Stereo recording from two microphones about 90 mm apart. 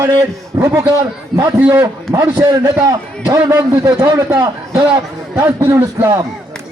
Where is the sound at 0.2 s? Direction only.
35° right (ahead or behind).